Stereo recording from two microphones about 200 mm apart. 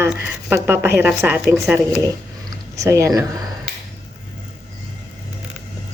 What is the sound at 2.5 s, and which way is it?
Speech, 15° right (ahead or behind).